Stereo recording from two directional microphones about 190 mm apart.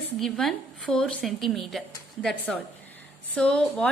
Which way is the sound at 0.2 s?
Centre (ahead or behind).